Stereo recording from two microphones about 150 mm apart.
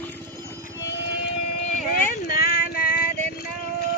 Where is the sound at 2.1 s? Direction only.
80° left.